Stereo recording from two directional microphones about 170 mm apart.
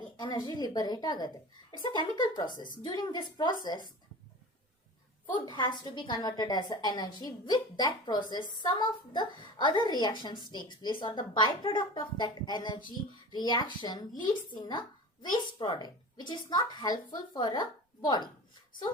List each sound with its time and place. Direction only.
0.2 s speech: 25° left (ahead or behind)
5.2 s speech: 30° left (ahead or behind)